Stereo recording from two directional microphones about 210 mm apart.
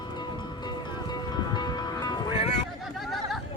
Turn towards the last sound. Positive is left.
turn(degrees=0)  # may be behind; listen again after turning